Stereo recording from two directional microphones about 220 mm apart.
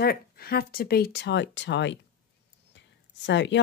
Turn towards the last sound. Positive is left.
turn(degrees=55)  # may be behind; listen again after turning